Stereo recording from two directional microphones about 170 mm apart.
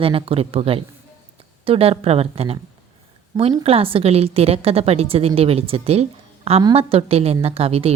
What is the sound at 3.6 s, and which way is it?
A woman's voice, 35° right (ahead or behind).